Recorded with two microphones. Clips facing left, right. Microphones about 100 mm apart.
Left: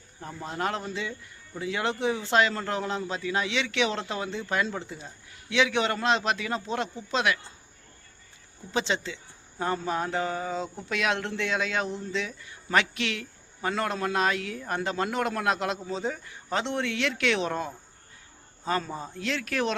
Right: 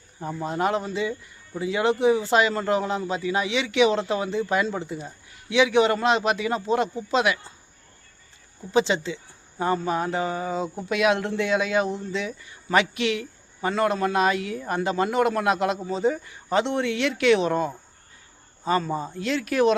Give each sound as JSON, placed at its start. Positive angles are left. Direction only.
{"t": 0.2, "sound": "speech", "side_deg": -15}
{"t": 8.7, "sound": "a man's voice", "side_deg": -5}